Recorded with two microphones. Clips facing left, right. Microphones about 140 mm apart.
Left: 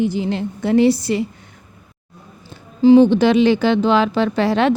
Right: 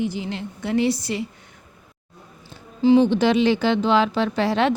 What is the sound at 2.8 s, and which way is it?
Speech, 45° left (ahead or behind).